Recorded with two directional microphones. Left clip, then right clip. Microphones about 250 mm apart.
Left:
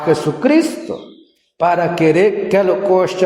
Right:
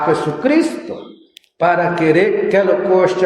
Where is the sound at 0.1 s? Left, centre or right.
Left.